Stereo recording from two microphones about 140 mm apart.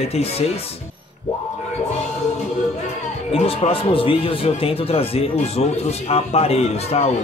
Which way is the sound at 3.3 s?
45° left (ahead or behind).